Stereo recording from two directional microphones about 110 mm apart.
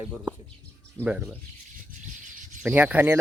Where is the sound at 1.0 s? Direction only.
20° right (ahead or behind).